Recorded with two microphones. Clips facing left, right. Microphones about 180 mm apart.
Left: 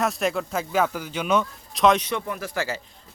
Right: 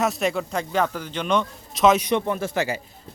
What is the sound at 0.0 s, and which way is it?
Speech, centre (ahead or behind).